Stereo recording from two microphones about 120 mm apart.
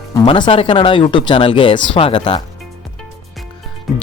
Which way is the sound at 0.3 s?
45° left (ahead or behind).